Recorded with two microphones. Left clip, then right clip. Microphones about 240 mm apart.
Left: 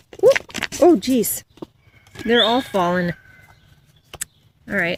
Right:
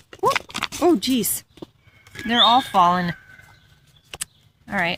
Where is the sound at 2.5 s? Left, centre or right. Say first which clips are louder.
Right 3 dB; centre.